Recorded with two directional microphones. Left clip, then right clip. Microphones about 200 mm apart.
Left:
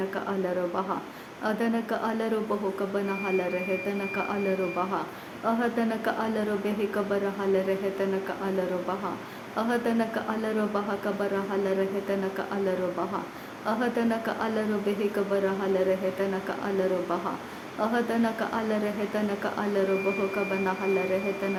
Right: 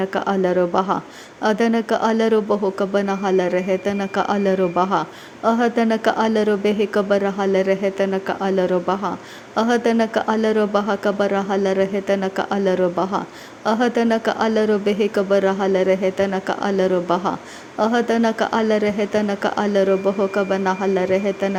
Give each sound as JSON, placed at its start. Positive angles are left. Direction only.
{"t": 0.1, "sound": "speech", "side_deg": -40}